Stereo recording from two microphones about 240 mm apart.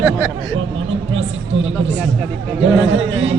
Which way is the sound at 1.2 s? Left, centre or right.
Right.